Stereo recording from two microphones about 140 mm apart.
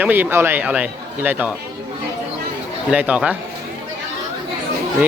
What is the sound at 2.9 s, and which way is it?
Speech, 10° right (ahead or behind).